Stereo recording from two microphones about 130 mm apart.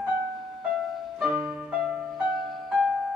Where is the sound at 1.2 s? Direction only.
Centre (ahead or behind).